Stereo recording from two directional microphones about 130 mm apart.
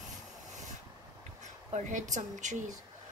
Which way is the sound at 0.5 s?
70° right (ahead or behind).